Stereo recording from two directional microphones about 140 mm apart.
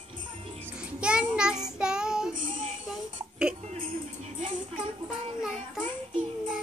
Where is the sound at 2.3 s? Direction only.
70° right (ahead or behind).